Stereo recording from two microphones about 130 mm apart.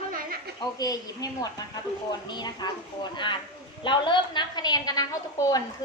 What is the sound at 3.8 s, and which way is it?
A woman's voice, 40° left (ahead or behind).